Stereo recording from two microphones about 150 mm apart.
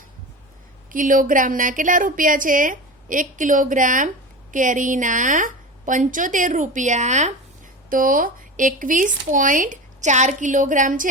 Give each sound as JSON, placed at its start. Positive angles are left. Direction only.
{"t": 0.9, "sound": "speech", "side_deg": -65}
{"t": 7.9, "sound": "speech", "side_deg": -65}